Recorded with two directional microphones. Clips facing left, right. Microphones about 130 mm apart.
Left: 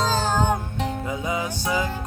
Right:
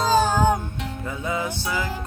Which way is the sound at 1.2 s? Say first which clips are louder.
Right 3 dB; 15° left (ahead or behind).